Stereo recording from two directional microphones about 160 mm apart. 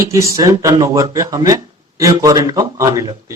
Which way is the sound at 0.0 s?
20° right (ahead or behind).